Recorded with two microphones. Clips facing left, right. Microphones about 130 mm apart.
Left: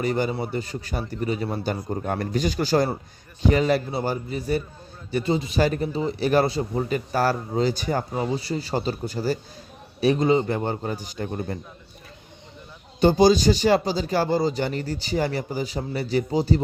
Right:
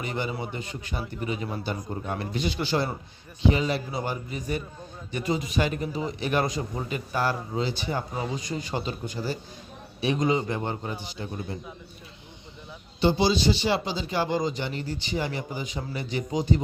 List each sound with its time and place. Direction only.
0.0 s a man's voice: 40° left (ahead or behind)
13.0 s speech: 45° left (ahead or behind)